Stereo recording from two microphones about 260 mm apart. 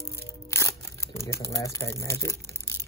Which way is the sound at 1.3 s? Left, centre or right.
Centre.